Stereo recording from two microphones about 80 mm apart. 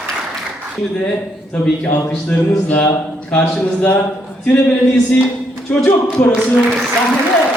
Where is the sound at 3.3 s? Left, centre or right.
Left.